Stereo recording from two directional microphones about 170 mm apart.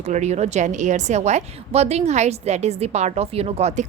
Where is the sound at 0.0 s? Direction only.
40° right (ahead or behind).